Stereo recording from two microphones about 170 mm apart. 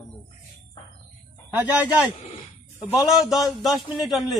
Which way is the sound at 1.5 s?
10° right (ahead or behind).